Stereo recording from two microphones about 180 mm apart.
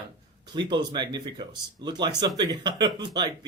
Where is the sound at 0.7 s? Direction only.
25° right (ahead or behind).